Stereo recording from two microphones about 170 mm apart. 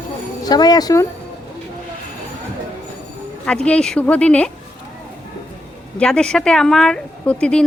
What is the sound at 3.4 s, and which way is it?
Speech, 5° left (ahead or behind).